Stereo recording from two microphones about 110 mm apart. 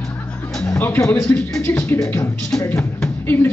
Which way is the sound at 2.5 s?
30° left (ahead or behind).